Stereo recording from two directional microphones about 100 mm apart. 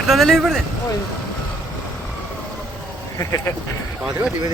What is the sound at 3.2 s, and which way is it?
Speech, 30° left (ahead or behind).